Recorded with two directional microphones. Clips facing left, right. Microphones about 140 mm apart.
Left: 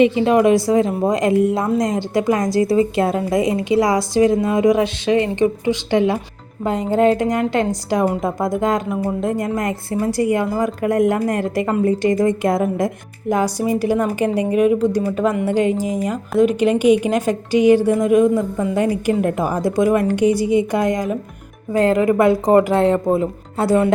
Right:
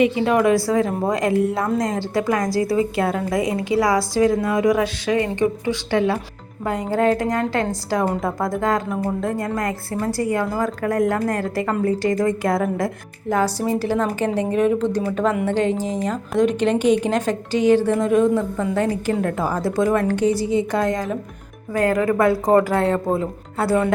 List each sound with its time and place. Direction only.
0.0 s a woman's voice: 20° left (ahead or behind)